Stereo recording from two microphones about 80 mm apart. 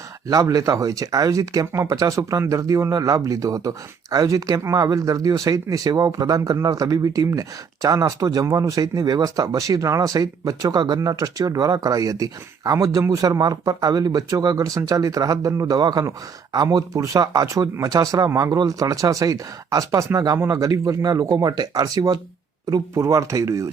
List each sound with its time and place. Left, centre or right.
0.3 s speech: right
23.0 s speech: right